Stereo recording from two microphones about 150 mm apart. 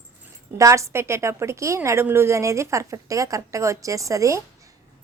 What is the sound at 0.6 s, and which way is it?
A woman's voice, 20° right (ahead or behind).